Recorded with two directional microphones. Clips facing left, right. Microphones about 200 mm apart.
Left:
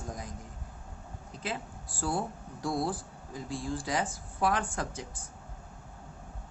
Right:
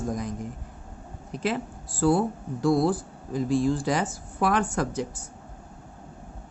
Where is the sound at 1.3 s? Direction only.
75° right (ahead or behind).